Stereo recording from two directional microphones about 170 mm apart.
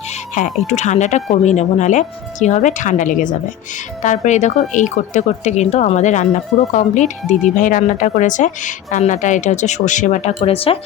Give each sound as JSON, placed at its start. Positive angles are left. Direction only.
{"t": 0.7, "sound": "a woman's voice", "side_deg": 45}